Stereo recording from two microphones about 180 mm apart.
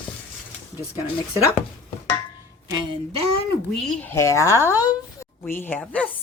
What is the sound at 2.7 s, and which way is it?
Speech, 30° right (ahead or behind).